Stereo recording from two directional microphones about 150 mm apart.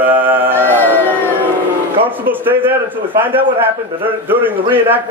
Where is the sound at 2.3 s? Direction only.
15° right (ahead or behind).